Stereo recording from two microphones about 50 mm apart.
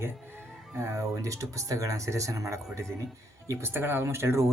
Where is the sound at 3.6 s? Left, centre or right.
Right.